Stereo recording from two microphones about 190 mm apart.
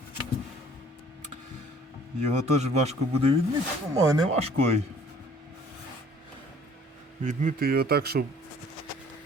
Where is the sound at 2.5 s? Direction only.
35° right (ahead or behind).